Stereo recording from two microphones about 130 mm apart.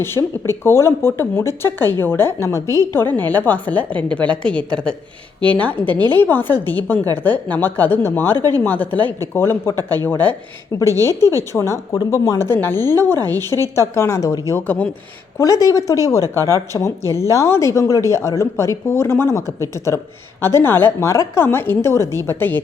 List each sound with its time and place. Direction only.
0.0 s speech: 20° left (ahead or behind)
8.4 s speech: 30° right (ahead or behind)
8.6 s a woman's voice: 15° left (ahead or behind)
13.4 s speech: 30° right (ahead or behind)
13.7 s a woman's voice: 20° left (ahead or behind)
14.5 s speech: 15° left (ahead or behind)
15.4 s a woman's voice: 25° left (ahead or behind)